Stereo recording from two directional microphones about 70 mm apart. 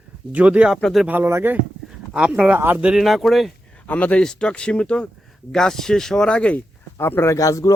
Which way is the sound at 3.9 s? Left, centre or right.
Centre.